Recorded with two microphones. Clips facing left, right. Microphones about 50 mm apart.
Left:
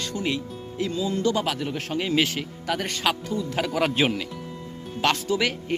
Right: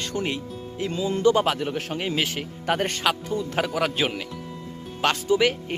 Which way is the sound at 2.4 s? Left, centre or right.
Right.